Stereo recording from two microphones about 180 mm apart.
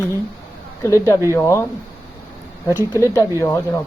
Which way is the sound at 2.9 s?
15° left (ahead or behind).